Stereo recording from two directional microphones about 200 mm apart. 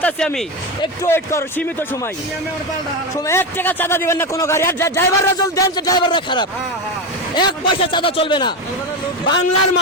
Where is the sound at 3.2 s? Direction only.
10° left (ahead or behind).